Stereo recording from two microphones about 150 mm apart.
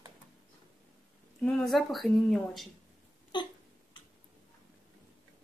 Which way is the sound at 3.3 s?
30° left (ahead or behind).